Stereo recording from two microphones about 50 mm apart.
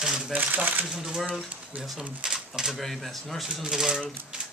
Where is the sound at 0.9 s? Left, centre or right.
Centre.